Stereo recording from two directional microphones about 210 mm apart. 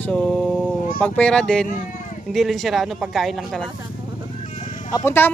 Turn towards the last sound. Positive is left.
turn(degrees=10)  # may be behind; listen again after turning